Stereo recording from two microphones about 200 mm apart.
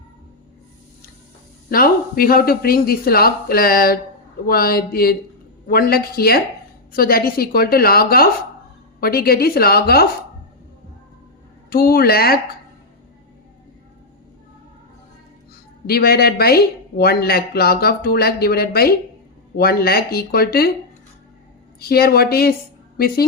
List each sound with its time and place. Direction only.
1.7 s a woman's voice: 45° left (ahead or behind)
11.7 s a woman's voice: 50° left (ahead or behind)
15.9 s a woman's voice: 50° left (ahead or behind)
21.8 s a woman's voice: 50° left (ahead or behind)